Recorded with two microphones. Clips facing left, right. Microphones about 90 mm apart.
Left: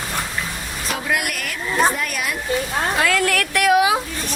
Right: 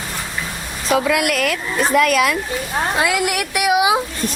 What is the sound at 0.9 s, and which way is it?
Speech, 90° right.